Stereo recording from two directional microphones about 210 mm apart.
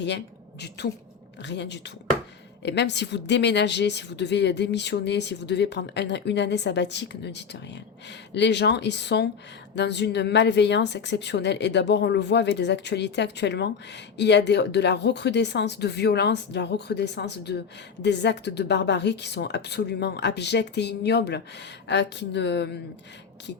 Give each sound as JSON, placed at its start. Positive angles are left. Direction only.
{"t": 1.4, "sound": "speech", "side_deg": 55}